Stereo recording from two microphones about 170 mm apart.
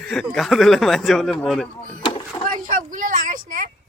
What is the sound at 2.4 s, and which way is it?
Speech, 50° right (ahead or behind).